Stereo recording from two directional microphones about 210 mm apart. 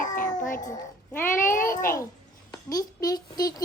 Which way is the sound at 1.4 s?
40° left (ahead or behind).